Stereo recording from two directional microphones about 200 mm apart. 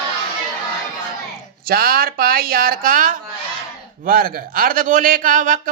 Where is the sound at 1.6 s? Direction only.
50° right (ahead or behind).